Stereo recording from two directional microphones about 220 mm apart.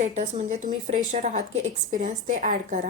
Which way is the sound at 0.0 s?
30° right (ahead or behind).